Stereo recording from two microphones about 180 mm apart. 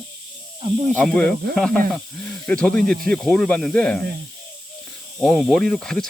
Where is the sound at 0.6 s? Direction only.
30° right (ahead or behind).